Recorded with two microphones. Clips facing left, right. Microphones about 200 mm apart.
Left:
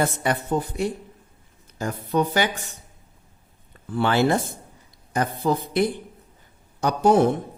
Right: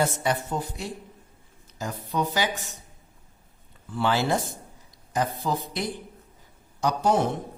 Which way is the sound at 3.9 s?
55° left (ahead or behind).